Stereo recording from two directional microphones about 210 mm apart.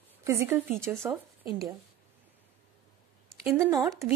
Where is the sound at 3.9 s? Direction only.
15° right (ahead or behind).